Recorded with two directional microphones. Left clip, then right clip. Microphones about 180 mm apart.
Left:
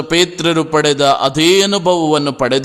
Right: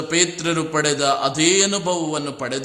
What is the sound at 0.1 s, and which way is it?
A man's voice, 40° left (ahead or behind).